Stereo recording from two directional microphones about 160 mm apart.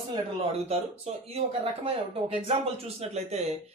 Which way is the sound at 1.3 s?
40° right (ahead or behind).